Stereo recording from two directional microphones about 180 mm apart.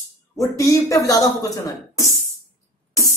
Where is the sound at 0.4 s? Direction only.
15° left (ahead or behind).